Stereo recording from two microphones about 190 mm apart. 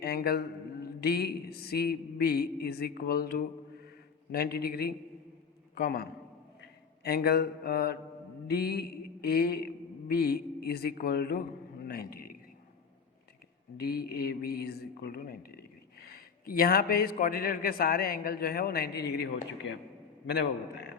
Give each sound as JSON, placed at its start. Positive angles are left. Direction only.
{"t": 0.0, "sound": "a man's voice", "side_deg": 55}
{"t": 8.4, "sound": "mantra", "side_deg": 55}
{"t": 11.9, "sound": "a sound", "side_deg": 50}
{"t": 13.7, "sound": "speech", "side_deg": 55}